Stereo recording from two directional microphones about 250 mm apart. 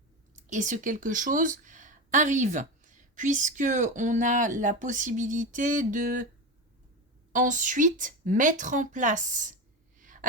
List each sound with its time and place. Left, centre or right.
0.5 s a woman's voice: right
7.3 s a woman's voice: right
10.0 s a sound: right